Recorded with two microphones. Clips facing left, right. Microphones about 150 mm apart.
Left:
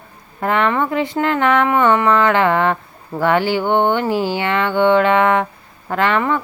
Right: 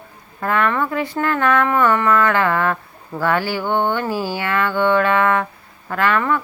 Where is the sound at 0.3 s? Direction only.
25° left (ahead or behind).